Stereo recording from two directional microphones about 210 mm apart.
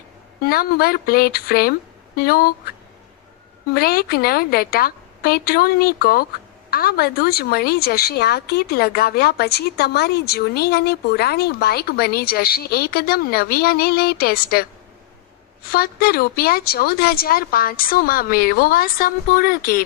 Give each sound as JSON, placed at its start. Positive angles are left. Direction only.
{"t": 0.4, "sound": "a woman's voice", "side_deg": 45}
{"t": 3.8, "sound": "a woman's voice", "side_deg": 45}
{"t": 15.7, "sound": "a woman's voice", "side_deg": 45}